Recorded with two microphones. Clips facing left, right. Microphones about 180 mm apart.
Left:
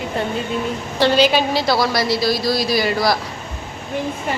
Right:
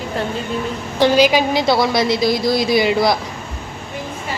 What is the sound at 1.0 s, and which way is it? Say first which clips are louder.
A woman's voice: right 2 dB; 10° right (ahead or behind).